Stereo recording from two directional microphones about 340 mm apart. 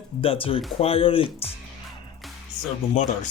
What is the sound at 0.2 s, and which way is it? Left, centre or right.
Speech, centre.